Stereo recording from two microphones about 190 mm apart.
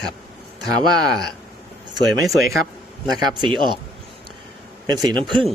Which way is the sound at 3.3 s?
25° right (ahead or behind).